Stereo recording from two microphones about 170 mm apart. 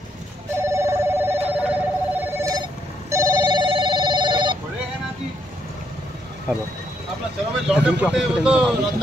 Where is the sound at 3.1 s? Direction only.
20° right (ahead or behind).